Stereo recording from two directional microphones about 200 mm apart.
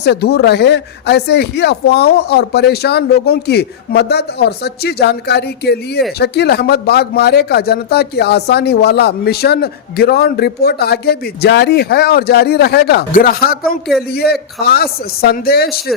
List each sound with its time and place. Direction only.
0.0 s speech: 55° left (ahead or behind)